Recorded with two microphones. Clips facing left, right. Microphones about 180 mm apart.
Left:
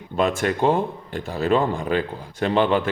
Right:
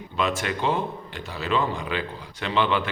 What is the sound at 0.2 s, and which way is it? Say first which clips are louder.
Speech: left 5 dB; 50° left (ahead or behind).